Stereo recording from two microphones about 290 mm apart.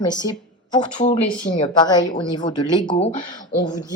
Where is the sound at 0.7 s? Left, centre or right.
Left.